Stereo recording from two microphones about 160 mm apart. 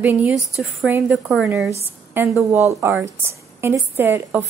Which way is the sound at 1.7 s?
15° right (ahead or behind).